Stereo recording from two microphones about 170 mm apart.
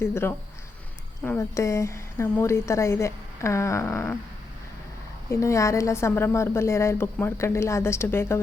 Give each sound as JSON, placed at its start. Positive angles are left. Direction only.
{"t": 0.0, "sound": "a woman's voice", "side_deg": 15}
{"t": 5.3, "sound": "a woman's voice", "side_deg": 15}